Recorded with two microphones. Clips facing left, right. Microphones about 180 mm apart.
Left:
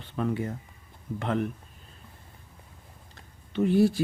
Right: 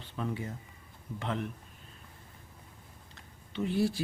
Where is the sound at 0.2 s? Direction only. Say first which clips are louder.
Left 7 dB; 60° left (ahead or behind).